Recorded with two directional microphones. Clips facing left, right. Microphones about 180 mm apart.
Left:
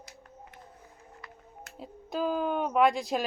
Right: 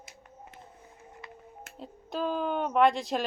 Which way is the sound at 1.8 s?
5° left (ahead or behind).